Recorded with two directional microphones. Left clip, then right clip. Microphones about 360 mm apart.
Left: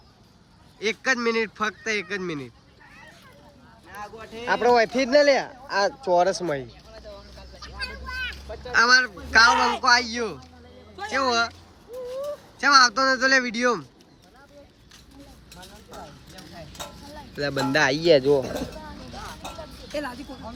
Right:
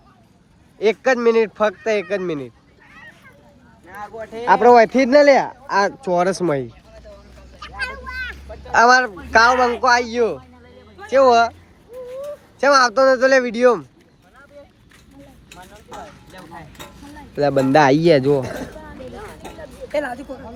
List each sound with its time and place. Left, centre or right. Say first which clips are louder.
0.8 s speech: right 7 dB; centre
3.9 s speech: right 7 dB; centre
4.4 s speech: right 9 dB; centre
8.7 s speech: right 5 dB; centre
9.6 s speech: right 5 dB; centre
9.8 s speech: right 5 dB; centre
12.5 s speech: right 4 dB; centre
17.4 s speech: right 8 dB; centre